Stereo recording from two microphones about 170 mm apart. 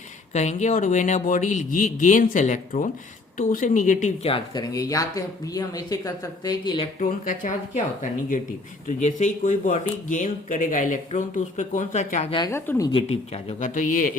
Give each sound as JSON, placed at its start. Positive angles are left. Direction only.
{"t": 0.3, "sound": "speech", "side_deg": 45}
{"t": 4.7, "sound": "speech", "side_deg": 20}
{"t": 7.0, "sound": "speech", "side_deg": 50}
{"t": 8.9, "sound": "speech", "side_deg": 45}
{"t": 12.5, "sound": "speech", "side_deg": 15}
{"t": 12.9, "sound": "speech", "side_deg": 35}